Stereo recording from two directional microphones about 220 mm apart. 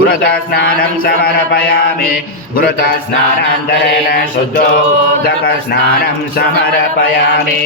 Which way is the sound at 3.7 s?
45° left (ahead or behind).